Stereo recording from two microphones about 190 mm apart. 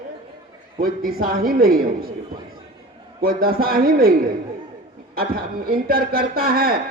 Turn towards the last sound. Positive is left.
turn(degrees=-50)  # may be behind; listen again after turning